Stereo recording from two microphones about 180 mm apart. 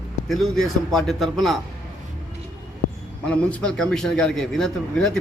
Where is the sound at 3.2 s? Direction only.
5° left (ahead or behind).